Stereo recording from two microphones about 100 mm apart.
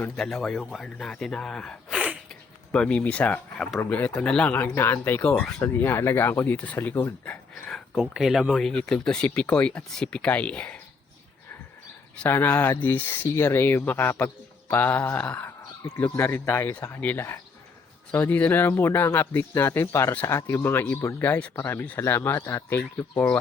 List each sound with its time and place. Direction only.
0.2 s speech: centre (ahead or behind)
1.9 s a sound: 10° right (ahead or behind)
2.7 s speech: 10° left (ahead or behind)
7.5 s speech: centre (ahead or behind)
12.1 s speech: 20° left (ahead or behind)
21.5 s speech: 25° left (ahead or behind)